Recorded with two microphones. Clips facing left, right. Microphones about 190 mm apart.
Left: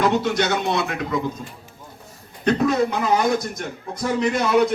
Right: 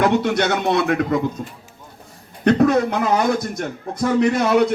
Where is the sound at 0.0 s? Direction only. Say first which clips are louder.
Right 2 dB; 60° right (ahead or behind).